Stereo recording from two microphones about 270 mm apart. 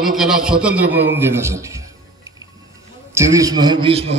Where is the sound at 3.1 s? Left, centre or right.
Centre.